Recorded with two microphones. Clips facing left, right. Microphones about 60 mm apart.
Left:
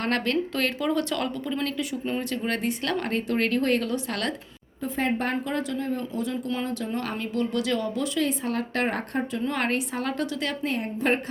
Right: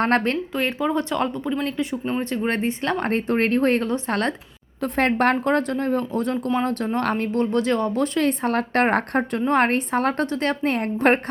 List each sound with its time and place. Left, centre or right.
0.0 s a woman's voice: right
0.5 s a woman's voice: right
4.8 s speech: right
9.4 s speech: right